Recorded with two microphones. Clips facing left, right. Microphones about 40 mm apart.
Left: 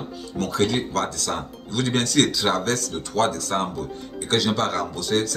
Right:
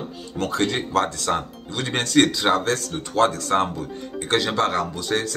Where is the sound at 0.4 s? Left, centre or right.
Right.